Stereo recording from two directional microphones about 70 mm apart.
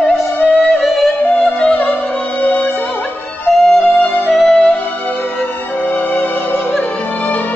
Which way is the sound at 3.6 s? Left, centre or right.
Centre.